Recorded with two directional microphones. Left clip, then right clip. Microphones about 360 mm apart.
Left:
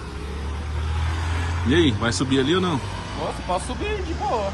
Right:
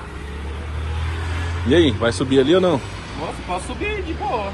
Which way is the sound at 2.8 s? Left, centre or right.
Left.